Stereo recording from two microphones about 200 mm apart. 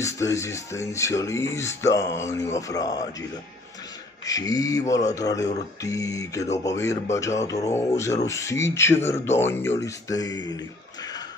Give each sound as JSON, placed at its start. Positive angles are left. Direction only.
{"t": 0.0, "sound": "speech", "side_deg": 15}
{"t": 4.3, "sound": "speech", "side_deg": 20}